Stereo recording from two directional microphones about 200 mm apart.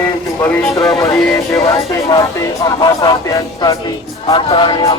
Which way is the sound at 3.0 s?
20° left (ahead or behind).